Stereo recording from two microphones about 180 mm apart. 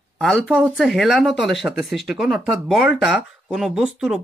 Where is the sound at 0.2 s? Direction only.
Centre (ahead or behind).